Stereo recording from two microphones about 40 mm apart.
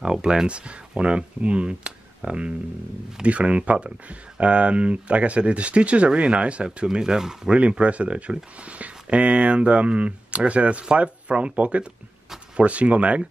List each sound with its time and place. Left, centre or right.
0.0 s speech: centre
6.9 s speech: centre
7.5 s speech: right